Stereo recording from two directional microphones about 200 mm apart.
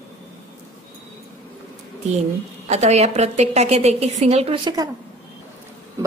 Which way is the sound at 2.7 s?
35° right (ahead or behind).